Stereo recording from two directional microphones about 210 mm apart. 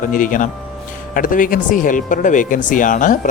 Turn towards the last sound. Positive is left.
turn(degrees=40)  # may be behind; listen again after turning